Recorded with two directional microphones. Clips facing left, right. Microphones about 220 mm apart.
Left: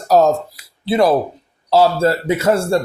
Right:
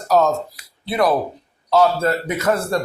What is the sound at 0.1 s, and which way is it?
Speech, 35° left (ahead or behind).